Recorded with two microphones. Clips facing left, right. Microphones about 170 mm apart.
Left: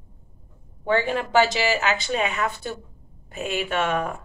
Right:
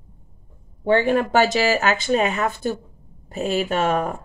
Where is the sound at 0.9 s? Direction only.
50° right (ahead or behind).